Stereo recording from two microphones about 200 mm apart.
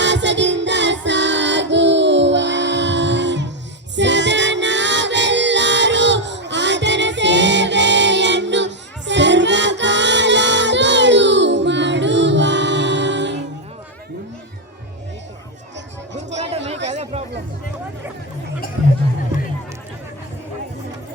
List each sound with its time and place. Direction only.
0.0 s music: 60° right (ahead or behind)
16.9 s chatter: 30° right (ahead or behind)